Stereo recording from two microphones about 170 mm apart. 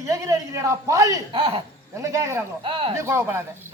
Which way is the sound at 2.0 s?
15° right (ahead or behind).